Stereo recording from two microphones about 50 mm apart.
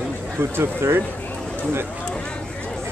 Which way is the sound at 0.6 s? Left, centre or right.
Right.